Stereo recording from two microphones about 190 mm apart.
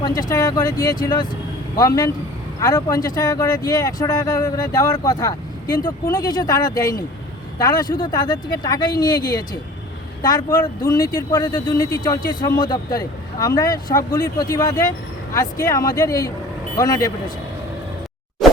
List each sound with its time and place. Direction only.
0.0 s speech: 20° left (ahead or behind)
18.4 s plop: centre (ahead or behind)